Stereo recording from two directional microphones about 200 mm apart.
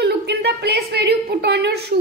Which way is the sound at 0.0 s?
55° right (ahead or behind).